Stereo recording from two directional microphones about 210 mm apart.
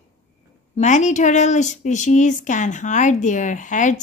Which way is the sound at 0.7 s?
35° left (ahead or behind).